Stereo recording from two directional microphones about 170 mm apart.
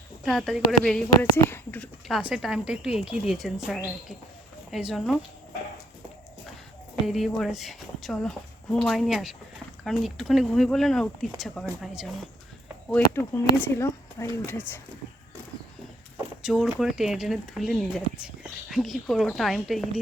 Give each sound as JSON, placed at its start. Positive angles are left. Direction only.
{"t": 0.3, "sound": "speech", "side_deg": 0}
{"t": 7.1, "sound": "speech", "side_deg": 0}
{"t": 12.9, "sound": "speech", "side_deg": 15}
{"t": 16.4, "sound": "speech", "side_deg": -5}